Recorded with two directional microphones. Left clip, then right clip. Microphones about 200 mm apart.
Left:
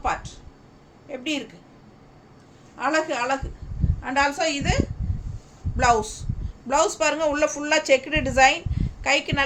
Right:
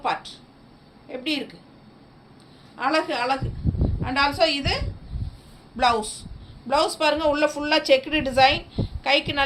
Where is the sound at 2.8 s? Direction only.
15° left (ahead or behind).